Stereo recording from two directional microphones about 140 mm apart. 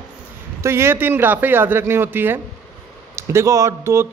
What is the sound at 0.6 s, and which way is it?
Speech, 20° right (ahead or behind).